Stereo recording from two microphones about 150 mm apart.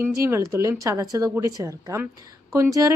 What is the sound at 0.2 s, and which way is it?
A woman's voice, 20° right (ahead or behind).